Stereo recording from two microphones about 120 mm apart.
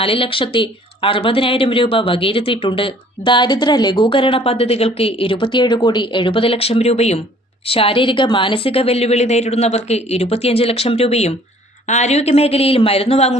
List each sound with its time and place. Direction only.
0.0 s speech: 50° left (ahead or behind)
7.6 s a woman's voice: 50° left (ahead or behind)